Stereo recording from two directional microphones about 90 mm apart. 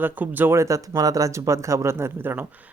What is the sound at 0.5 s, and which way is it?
Speech, 35° right (ahead or behind).